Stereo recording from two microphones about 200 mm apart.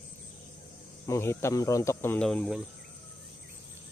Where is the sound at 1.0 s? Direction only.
15° left (ahead or behind).